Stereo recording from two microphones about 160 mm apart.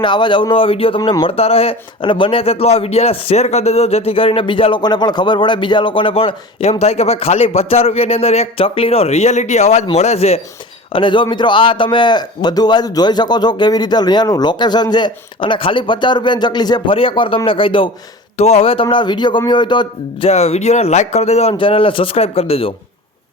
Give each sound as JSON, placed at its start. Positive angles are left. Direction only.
{"t": 0.0, "sound": "a man's voice", "side_deg": 30}